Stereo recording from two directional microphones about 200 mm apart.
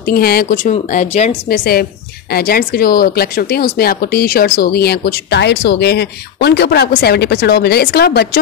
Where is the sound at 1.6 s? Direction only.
50° left (ahead or behind).